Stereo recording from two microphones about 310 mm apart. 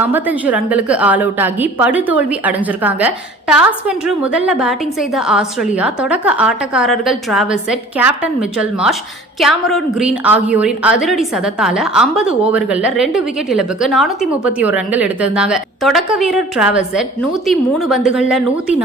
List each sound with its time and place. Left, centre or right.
0.0 s a woman's voice: centre